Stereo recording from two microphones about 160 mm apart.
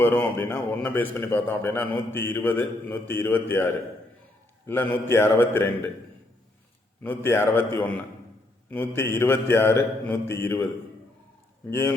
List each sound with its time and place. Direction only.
0.0 s a man's voice: 10° left (ahead or behind)
7.0 s a man's voice: 15° left (ahead or behind)
9.0 s a man's voice: 15° left (ahead or behind)
11.7 s a man's voice: 15° left (ahead or behind)